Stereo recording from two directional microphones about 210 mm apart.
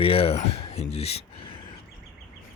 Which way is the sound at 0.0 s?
25° left (ahead or behind).